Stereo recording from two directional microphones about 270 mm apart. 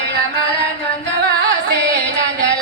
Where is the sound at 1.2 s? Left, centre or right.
Right.